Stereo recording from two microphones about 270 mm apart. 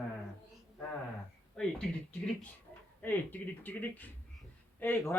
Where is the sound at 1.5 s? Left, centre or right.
Centre.